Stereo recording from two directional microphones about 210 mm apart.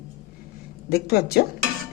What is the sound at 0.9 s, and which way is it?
Speech, 50° left (ahead or behind).